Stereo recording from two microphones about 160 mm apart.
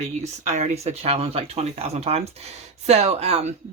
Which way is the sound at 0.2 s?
45° right (ahead or behind).